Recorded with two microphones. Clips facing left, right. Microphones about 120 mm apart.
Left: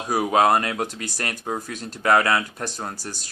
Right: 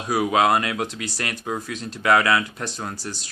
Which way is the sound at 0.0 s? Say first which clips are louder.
Left 1 dB; 40° left (ahead or behind).